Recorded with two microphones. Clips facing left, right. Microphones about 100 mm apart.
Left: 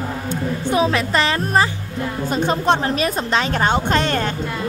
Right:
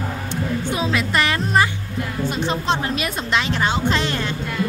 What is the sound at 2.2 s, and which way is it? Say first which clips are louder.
Speech: left 5 dB; 45° left (ahead or behind).